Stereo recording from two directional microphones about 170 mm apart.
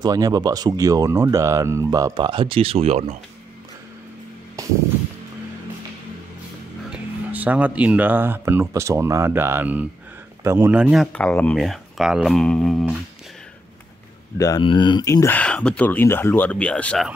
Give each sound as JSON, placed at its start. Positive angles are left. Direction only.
{"t": 0.0, "sound": "speech", "side_deg": -20}
{"t": 2.1, "sound": "speech", "side_deg": -30}
{"t": 6.9, "sound": "speech", "side_deg": -10}
{"t": 11.1, "sound": "speech", "side_deg": 5}
{"t": 14.4, "sound": "speech", "side_deg": 25}